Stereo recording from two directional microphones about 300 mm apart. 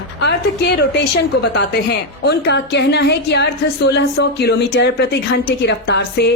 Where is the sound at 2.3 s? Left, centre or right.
Left.